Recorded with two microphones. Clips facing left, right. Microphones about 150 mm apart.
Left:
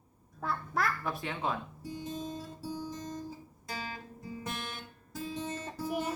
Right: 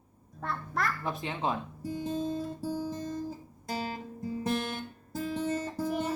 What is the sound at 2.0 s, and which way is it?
Guitar, 50° right (ahead or behind).